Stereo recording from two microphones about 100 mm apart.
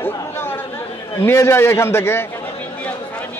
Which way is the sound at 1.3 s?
25° left (ahead or behind).